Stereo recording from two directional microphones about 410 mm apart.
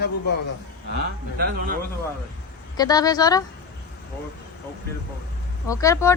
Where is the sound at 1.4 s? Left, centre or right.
Right.